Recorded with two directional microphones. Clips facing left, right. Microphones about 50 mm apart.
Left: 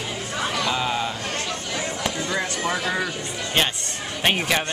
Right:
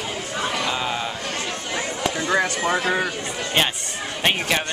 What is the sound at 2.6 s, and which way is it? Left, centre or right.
Speech, right.